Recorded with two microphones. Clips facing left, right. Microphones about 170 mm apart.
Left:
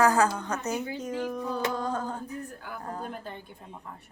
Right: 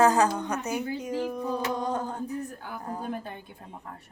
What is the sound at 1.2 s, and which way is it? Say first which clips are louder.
Music: left 1 dB; 10° right (ahead or behind).